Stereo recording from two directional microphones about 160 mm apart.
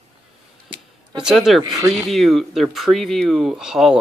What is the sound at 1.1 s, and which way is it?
Speech, 5° right (ahead or behind).